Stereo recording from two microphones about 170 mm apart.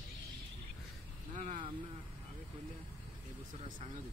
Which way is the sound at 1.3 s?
45° right (ahead or behind).